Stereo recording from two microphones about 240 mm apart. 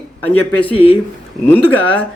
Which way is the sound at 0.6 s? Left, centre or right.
Left.